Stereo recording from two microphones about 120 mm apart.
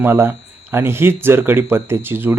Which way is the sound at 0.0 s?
20° right (ahead or behind).